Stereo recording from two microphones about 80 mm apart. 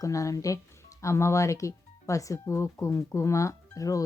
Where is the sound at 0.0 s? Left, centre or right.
Left.